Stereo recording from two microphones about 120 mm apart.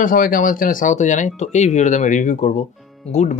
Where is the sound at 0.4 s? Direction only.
90° left.